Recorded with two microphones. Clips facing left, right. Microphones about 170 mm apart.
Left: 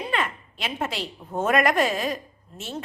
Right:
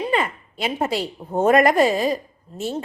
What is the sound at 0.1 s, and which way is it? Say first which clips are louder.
A woman's voice: right 5 dB; 35° right (ahead or behind).